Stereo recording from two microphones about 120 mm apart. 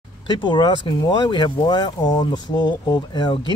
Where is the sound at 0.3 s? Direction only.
40° left (ahead or behind).